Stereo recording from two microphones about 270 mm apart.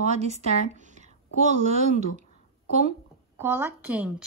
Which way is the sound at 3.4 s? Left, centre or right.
Centre.